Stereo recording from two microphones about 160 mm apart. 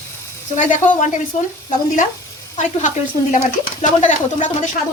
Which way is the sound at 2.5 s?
50° left (ahead or behind).